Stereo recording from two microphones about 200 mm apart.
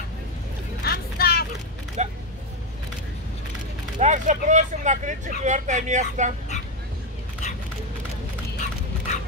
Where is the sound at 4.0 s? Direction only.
40° right (ahead or behind).